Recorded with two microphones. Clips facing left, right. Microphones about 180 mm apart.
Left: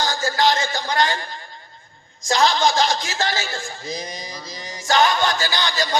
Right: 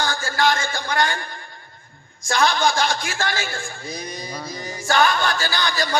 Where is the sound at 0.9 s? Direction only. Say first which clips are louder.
Left 1 dB; 20° left (ahead or behind).